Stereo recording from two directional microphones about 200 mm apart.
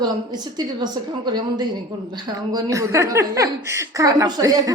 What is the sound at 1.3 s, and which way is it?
Speech, 20° right (ahead or behind).